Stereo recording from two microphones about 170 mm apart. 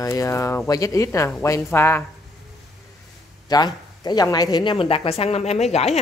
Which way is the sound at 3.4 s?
25° left (ahead or behind).